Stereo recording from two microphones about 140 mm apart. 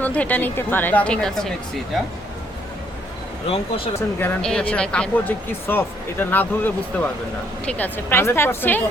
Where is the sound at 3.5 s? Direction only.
45° left (ahead or behind).